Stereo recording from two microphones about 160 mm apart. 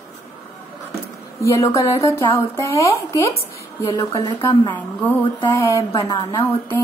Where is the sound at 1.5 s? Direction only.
20° left (ahead or behind).